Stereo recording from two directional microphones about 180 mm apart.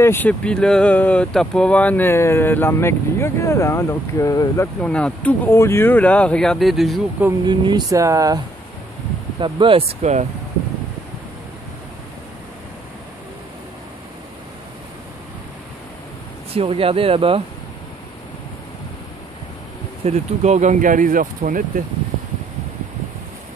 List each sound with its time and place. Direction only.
0.0 s speech: 10° left (ahead or behind)
4.8 s speech: 5° left (ahead or behind)
7.4 s speech: 25° right (ahead or behind)
9.4 s speech: 30° right (ahead or behind)
16.5 s speech: 30° right (ahead or behind)
20.1 s speech: 40° right (ahead or behind)